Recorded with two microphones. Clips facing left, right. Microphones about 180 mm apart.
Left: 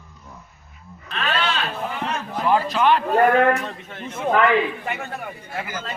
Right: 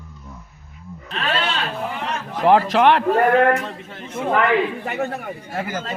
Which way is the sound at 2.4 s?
85° right.